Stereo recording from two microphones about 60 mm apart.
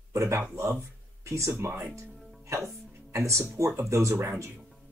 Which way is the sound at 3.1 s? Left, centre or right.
Right.